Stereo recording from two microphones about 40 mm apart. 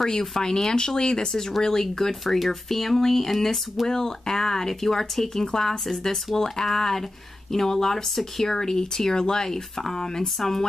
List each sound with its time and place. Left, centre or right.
0.0 s speech: centre